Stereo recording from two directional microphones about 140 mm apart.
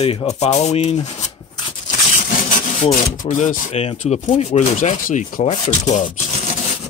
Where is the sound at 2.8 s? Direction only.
60° left (ahead or behind).